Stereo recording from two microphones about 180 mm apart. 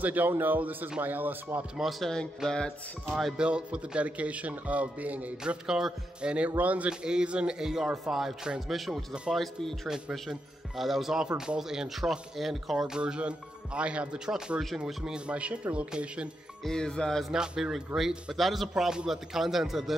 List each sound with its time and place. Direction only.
0.0 s speech: 10° right (ahead or behind)